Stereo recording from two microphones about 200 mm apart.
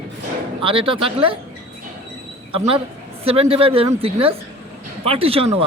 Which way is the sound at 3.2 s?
30° right (ahead or behind).